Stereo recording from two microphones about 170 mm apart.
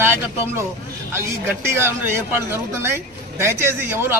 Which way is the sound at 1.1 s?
15° right (ahead or behind).